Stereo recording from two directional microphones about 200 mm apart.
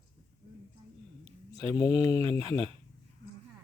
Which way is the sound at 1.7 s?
15° left (ahead or behind).